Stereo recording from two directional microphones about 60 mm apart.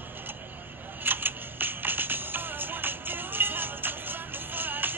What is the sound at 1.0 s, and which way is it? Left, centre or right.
Music, right.